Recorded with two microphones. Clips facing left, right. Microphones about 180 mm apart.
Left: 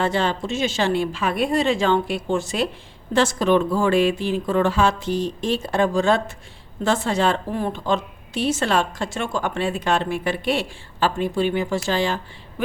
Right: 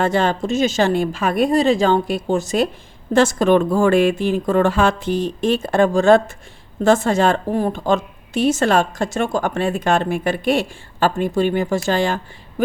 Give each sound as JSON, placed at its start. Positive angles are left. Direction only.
{"t": 0.0, "sound": "a woman's voice", "side_deg": -50}